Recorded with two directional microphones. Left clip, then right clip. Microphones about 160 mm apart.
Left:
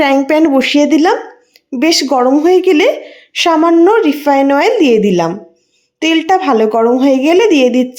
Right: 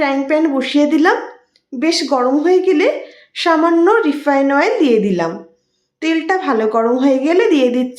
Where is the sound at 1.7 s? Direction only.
45° left (ahead or behind).